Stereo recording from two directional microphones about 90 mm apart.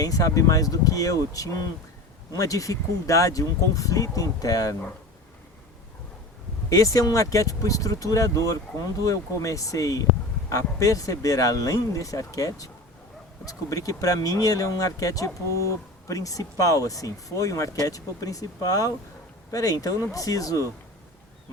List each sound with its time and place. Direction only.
0.0 s speech: 40° left (ahead or behind)
6.7 s speech: 35° left (ahead or behind)